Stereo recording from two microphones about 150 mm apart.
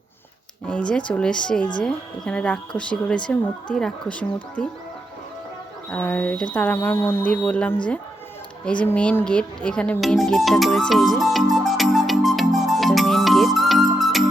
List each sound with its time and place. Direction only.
0.7 s speech: 10° left (ahead or behind)
5.9 s speech: 10° left (ahead or behind)
8.6 s music: 10° left (ahead or behind)